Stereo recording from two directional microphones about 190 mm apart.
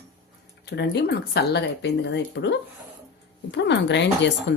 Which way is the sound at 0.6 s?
60° left (ahead or behind).